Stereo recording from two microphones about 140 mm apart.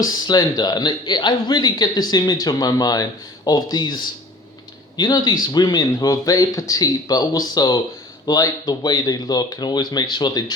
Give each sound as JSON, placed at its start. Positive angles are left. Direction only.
{"t": 0.0, "sound": "speech", "side_deg": 30}